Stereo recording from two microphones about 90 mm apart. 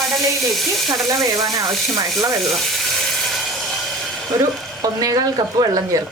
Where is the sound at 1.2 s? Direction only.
40° right (ahead or behind).